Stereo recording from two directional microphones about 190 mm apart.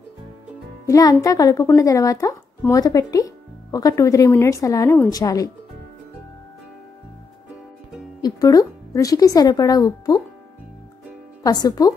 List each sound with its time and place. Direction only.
0.8 s speech: 15° left (ahead or behind)
8.2 s speech: 20° left (ahead or behind)
11.4 s speech: 20° left (ahead or behind)